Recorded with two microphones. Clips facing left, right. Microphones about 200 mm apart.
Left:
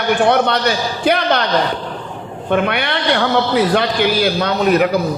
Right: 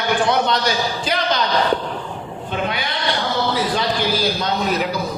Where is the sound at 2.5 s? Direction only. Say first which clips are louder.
Left 8 dB; 65° left (ahead or behind).